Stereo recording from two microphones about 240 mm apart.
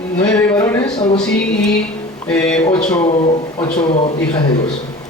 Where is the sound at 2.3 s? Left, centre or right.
Centre.